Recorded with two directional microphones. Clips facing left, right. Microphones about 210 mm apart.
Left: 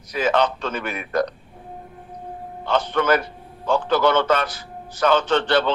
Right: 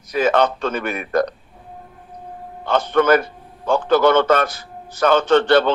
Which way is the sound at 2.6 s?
50° right (ahead or behind).